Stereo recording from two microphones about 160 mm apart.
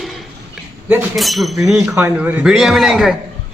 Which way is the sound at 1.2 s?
Centre (ahead or behind).